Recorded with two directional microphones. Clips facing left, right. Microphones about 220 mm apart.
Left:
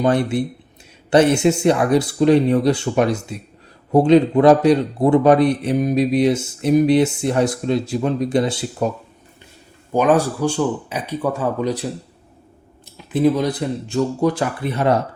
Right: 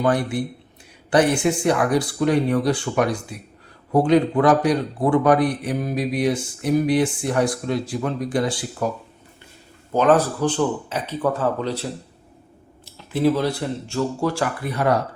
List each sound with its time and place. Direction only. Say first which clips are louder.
0.0 s a man's voice: left 3 dB; 25° left (ahead or behind)
9.9 s a man's voice: left 1 dB; 15° left (ahead or behind)